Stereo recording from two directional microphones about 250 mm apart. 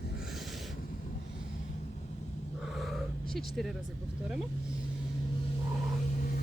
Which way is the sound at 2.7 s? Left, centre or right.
Centre.